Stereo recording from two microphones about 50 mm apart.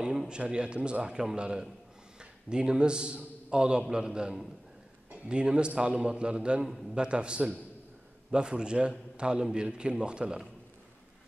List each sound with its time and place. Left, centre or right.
0.3 s a man's voice: centre
6.6 s a man's voice: centre
7.0 s a man's voice: centre